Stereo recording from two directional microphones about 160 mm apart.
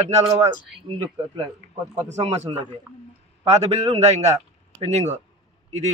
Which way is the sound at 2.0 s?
45° right (ahead or behind).